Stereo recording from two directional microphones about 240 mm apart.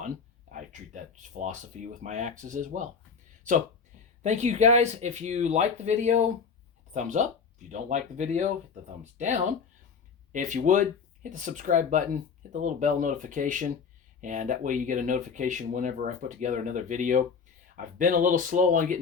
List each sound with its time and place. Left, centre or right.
0.5 s speech: right
4.2 s speech: right